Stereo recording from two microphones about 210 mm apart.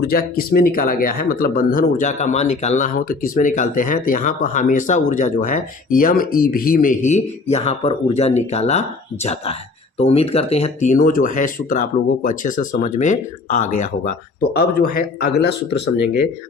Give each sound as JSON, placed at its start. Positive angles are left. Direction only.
{"t": 0.0, "sound": "a man's voice", "side_deg": 45}